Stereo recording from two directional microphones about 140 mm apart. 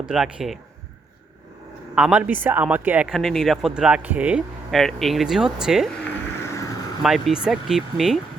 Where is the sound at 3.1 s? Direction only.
Centre (ahead or behind).